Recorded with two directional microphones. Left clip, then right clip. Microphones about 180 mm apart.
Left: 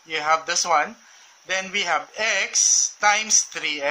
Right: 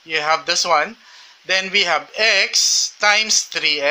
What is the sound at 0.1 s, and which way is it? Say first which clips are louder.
Speech: right 3 dB; 30° right (ahead or behind).